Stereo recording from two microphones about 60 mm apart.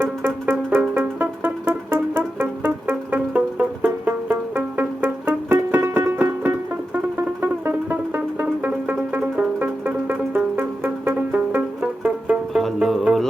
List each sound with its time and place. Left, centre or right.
0.0 s music: right
8.6 s music: right
11.8 s music: right
12.5 s music: centre